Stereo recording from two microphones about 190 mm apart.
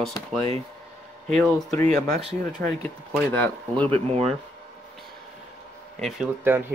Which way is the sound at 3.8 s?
30° right (ahead or behind).